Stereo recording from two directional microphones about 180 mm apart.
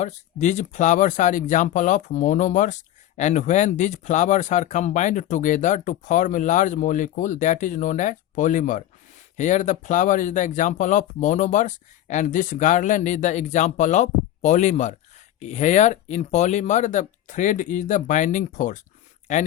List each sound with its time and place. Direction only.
0.0 s speech: 40° left (ahead or behind)